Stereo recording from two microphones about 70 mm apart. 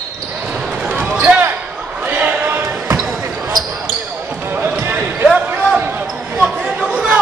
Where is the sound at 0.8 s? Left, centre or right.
Centre.